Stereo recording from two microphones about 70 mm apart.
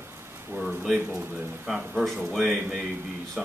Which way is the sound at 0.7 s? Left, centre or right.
Centre.